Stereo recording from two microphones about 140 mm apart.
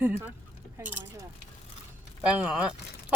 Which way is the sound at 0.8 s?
10° right (ahead or behind).